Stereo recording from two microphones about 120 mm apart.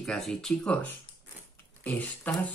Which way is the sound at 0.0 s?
Centre (ahead or behind).